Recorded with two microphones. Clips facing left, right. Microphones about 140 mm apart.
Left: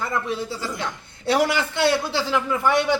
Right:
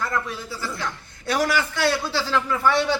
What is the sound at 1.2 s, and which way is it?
Speech, 25° left (ahead or behind).